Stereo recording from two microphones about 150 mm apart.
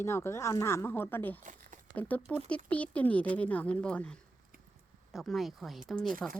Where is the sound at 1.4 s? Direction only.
55° right (ahead or behind).